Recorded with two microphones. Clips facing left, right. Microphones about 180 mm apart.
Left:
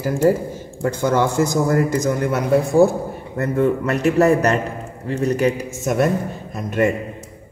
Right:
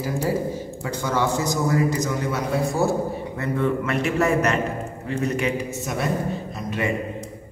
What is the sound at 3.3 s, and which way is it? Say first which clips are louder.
A man's voice: left 7 dB; 45° left (ahead or behind).